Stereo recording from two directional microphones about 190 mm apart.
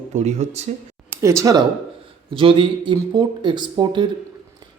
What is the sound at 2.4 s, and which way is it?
Speech, 25° right (ahead or behind).